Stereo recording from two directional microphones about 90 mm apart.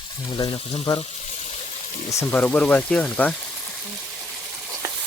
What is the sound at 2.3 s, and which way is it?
Speech, 15° left (ahead or behind).